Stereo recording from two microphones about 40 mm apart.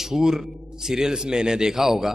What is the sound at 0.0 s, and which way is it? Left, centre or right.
A man's voice, centre.